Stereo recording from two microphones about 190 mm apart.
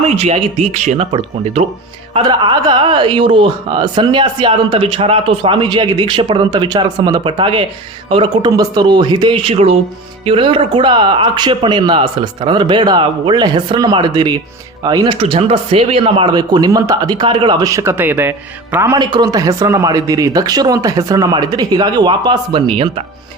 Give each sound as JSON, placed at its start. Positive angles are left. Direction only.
{"t": 0.0, "sound": "a man's voice", "side_deg": -30}